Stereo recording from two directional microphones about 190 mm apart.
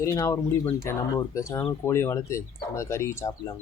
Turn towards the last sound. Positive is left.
turn(degrees=15)  # may be behind; listen again after turning